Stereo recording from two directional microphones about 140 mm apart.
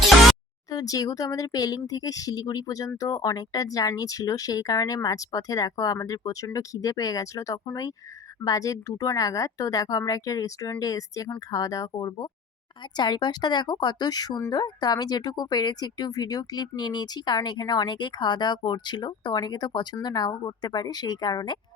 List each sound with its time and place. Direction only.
0.7 s speech: 25° left (ahead or behind)